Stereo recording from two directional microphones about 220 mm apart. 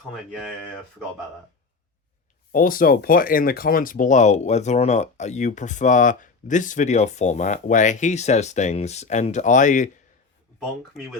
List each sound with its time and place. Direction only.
0.1 s speech: centre (ahead or behind)
2.5 s speech: 40° left (ahead or behind)
10.6 s speech: centre (ahead or behind)